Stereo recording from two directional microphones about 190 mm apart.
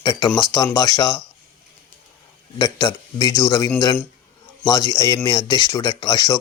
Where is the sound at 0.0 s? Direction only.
20° left (ahead or behind).